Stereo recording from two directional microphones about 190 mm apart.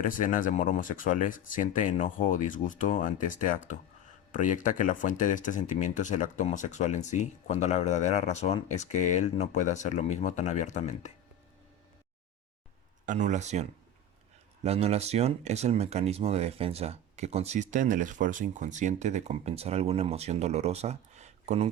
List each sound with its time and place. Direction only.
0.1 s speech: 45° left (ahead or behind)
13.1 s speech: 40° right (ahead or behind)